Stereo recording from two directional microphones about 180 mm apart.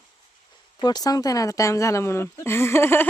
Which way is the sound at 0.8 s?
20° left (ahead or behind).